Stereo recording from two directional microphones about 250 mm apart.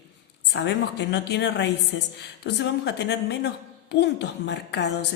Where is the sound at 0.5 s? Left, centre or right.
Left.